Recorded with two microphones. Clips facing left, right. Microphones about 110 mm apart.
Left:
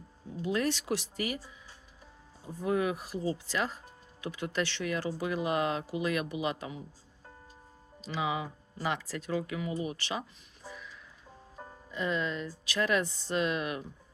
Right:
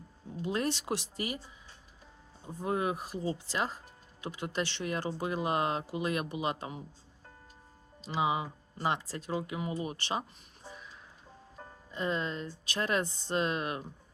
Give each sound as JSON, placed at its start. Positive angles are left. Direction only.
{"t": 0.4, "sound": "speech", "side_deg": -30}
{"t": 8.0, "sound": "speech", "side_deg": -25}